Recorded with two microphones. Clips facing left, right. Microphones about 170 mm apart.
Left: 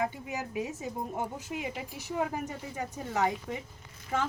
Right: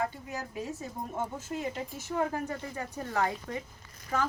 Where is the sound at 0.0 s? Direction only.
15° left (ahead or behind).